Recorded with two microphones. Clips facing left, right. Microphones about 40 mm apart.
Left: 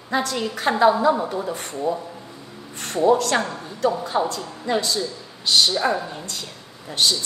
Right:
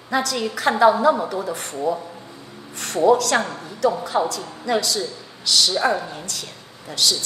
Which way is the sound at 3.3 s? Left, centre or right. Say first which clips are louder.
Right 1 dB; centre.